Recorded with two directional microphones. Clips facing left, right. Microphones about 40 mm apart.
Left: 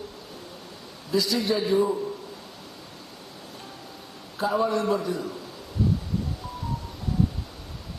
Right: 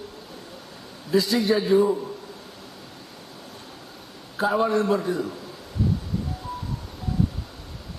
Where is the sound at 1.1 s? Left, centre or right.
Right.